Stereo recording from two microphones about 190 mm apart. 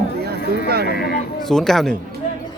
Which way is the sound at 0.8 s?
55° left (ahead or behind).